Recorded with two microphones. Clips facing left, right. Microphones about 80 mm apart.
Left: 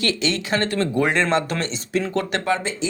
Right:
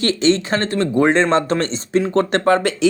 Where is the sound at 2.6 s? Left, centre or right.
Right.